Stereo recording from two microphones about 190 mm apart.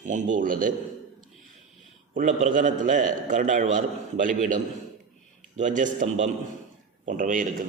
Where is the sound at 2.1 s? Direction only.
40° right (ahead or behind).